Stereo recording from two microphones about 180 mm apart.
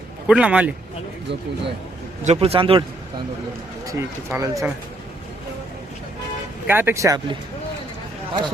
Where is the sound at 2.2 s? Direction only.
35° right (ahead or behind).